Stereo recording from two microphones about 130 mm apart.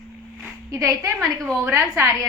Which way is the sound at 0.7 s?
25° right (ahead or behind).